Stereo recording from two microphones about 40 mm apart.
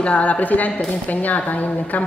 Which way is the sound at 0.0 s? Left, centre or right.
Left.